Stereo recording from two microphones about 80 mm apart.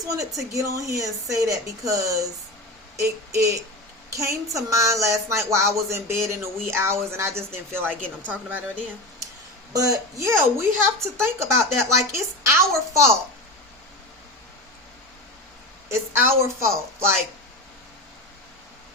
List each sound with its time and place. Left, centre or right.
0.0 s a woman's voice: right
9.7 s speech: right
10.2 s a woman's voice: right
15.9 s a woman's voice: right